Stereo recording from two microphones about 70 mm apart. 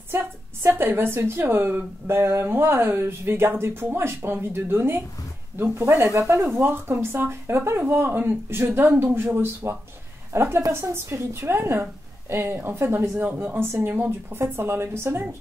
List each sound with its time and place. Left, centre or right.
0.1 s a woman's voice: right
13.9 s speech: right
14.5 s a woman's voice: right